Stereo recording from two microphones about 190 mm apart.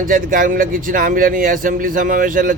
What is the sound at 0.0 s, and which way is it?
A man's voice, 45° right (ahead or behind).